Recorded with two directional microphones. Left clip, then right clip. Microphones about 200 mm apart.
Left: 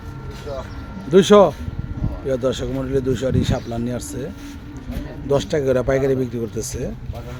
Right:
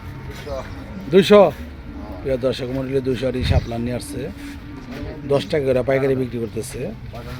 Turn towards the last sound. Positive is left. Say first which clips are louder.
# even
turn(degrees=15)  # may be behind; listen again after turning